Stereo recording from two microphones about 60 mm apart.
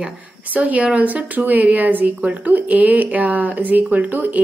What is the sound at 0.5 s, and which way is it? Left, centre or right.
Speech, right.